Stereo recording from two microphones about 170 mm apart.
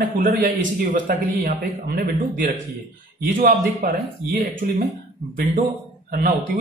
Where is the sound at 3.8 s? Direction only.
55° right (ahead or behind).